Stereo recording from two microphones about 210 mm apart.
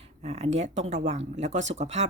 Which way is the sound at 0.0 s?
30° right (ahead or behind).